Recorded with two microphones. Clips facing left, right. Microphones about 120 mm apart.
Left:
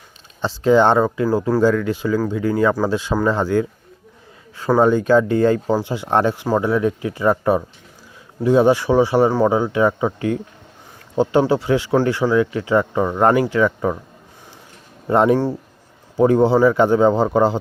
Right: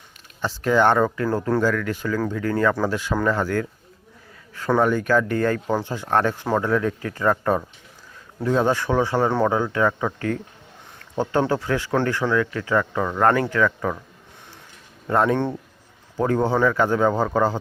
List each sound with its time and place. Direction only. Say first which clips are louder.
0.4 s speech: left 4 dB; 20° left (ahead or behind)
1.6 s speech: left 6 dB; 20° left (ahead or behind)
15.0 s speech: left 5 dB; 20° left (ahead or behind)